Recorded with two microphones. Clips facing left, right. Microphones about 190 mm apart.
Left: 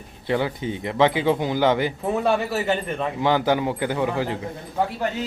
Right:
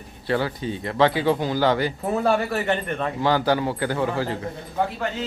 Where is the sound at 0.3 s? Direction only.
20° left (ahead or behind).